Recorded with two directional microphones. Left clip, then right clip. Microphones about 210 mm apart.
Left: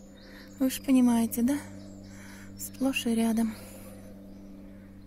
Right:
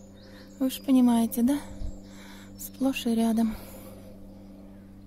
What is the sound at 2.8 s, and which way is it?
Speech, 5° right (ahead or behind).